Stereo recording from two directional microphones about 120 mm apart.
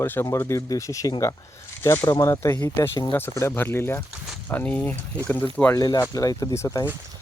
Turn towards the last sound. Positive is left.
turn(degrees=25)  # may be behind; listen again after turning